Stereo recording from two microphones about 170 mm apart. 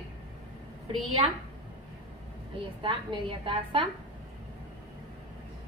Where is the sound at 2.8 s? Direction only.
30° right (ahead or behind).